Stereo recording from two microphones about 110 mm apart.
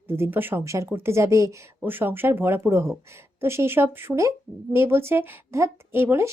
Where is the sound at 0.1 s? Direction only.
20° right (ahead or behind).